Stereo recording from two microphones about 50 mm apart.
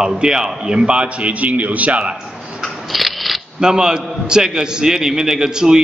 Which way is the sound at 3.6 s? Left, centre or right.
Centre.